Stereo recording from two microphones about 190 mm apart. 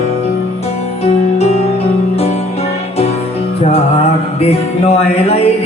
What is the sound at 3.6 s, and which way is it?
Music, 35° left (ahead or behind).